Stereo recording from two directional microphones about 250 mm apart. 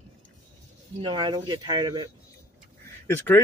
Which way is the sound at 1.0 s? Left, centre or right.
Centre.